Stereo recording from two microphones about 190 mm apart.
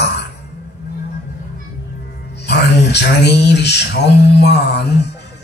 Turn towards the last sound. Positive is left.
turn(degrees=60)  # may be behind; listen again after turning